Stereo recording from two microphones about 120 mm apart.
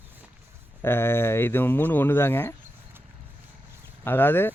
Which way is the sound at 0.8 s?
20° left (ahead or behind).